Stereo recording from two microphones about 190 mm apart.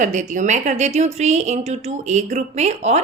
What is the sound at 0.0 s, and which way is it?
A woman's voice, 40° right (ahead or behind).